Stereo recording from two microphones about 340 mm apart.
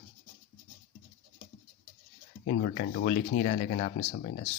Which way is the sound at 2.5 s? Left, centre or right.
Left.